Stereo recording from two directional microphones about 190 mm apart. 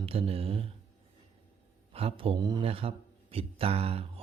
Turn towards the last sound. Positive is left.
turn(degrees=-30)  # may be behind; listen again after turning